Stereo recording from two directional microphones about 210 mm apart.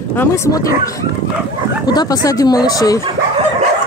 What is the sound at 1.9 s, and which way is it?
Speech, 20° left (ahead or behind).